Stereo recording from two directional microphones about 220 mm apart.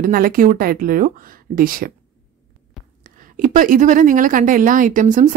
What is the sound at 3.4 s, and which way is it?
Speech, 35° right (ahead or behind).